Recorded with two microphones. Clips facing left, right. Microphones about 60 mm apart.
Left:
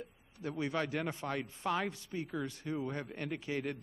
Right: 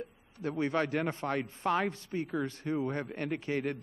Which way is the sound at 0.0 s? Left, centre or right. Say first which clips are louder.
Right 5 dB; right.